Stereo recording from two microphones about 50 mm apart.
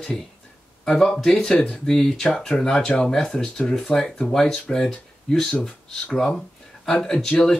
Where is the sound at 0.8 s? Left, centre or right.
Centre.